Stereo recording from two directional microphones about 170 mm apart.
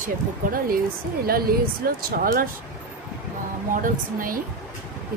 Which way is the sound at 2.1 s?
55° right (ahead or behind).